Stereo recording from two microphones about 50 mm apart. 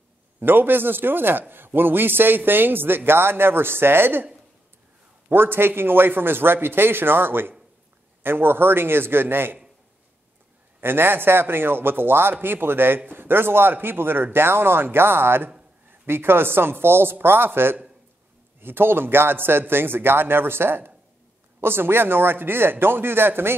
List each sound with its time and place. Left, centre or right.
0.4 s a man's voice: right
5.3 s a man's voice: right
10.8 s a man's voice: right